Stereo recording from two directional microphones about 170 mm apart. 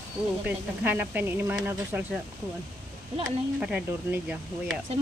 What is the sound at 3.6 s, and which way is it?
Speech, 5° right (ahead or behind).